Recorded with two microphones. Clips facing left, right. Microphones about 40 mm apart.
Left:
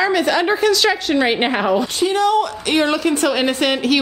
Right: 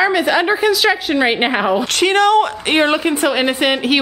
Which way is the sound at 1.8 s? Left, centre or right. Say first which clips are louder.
Right 3 dB; right.